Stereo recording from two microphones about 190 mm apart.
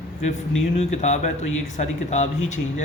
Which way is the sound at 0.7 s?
35° left (ahead or behind).